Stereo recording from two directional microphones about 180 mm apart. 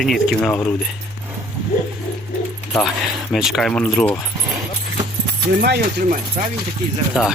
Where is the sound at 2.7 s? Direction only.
5° left (ahead or behind).